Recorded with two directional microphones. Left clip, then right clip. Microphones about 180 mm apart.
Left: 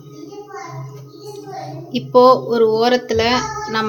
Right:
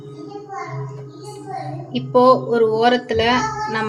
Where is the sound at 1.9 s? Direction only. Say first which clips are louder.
Left 3 dB; 20° left (ahead or behind).